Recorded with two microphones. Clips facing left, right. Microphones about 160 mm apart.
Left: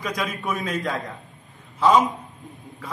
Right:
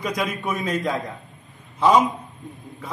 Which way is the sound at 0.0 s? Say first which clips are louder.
Right 2 dB; centre (ahead or behind).